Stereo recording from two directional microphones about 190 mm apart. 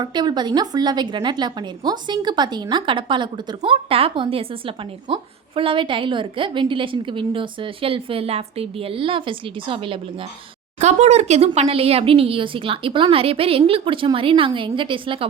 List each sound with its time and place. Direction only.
0.0 s a woman's voice: 25° right (ahead or behind)